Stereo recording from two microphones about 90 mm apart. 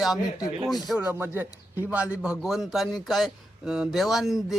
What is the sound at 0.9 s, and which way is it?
A man's voice, 20° right (ahead or behind).